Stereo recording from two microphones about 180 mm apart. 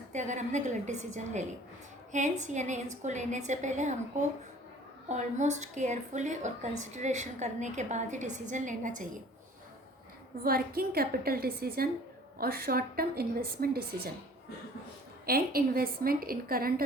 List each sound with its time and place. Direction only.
0.1 s a woman's voice: 40° right (ahead or behind)
10.4 s a woman's voice: 55° right (ahead or behind)
15.3 s a woman's voice: 55° right (ahead or behind)